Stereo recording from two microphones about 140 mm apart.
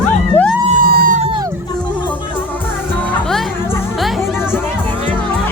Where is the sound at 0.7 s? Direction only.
85° right.